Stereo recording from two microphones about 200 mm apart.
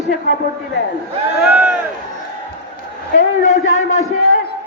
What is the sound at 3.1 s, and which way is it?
Speech, 35° left (ahead or behind).